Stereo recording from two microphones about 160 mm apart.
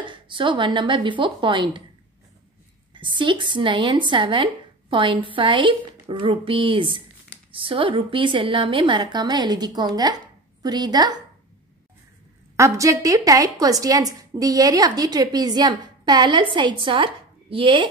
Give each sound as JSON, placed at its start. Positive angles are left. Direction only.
{"t": 0.0, "sound": "speech", "side_deg": -30}
{"t": 2.9, "sound": "a woman's voice", "side_deg": -30}
{"t": 12.5, "sound": "a woman's voice", "side_deg": -20}